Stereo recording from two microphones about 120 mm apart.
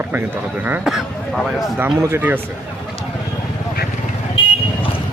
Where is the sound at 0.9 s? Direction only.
Centre (ahead or behind).